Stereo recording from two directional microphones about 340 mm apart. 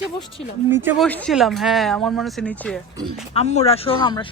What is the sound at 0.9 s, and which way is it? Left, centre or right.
Speech, centre.